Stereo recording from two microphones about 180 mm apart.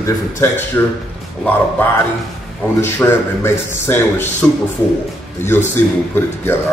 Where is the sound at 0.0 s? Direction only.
15° left (ahead or behind).